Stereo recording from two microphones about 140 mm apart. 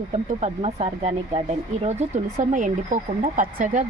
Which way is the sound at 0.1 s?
50° right (ahead or behind).